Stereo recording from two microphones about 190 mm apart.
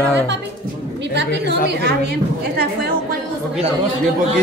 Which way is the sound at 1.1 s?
60° right (ahead or behind).